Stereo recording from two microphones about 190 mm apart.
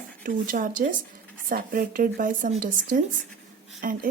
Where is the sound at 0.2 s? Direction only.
45° right (ahead or behind).